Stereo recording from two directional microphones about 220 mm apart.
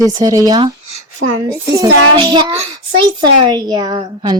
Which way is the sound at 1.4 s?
15° right (ahead or behind).